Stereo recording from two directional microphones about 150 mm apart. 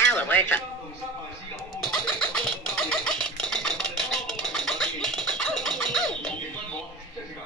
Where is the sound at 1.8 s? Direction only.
5° left (ahead or behind).